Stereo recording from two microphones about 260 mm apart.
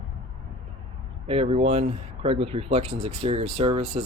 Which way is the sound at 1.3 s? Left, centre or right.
Right.